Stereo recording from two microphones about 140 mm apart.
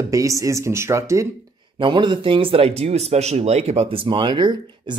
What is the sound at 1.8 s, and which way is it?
Speech, 35° right (ahead or behind).